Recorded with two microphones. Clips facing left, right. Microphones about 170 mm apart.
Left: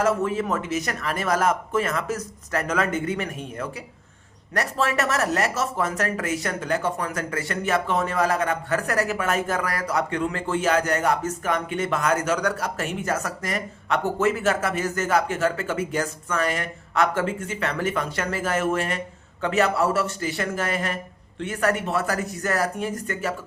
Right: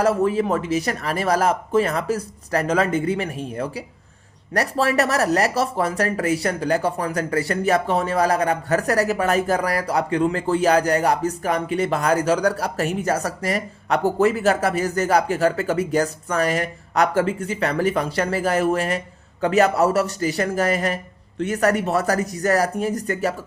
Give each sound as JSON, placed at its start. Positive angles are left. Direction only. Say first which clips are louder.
{"t": 0.0, "sound": "speech", "louder": "right 4 dB", "side_deg": -35}